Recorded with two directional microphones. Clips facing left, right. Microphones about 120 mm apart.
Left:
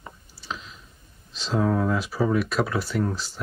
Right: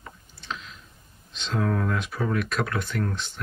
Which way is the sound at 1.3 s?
Centre (ahead or behind).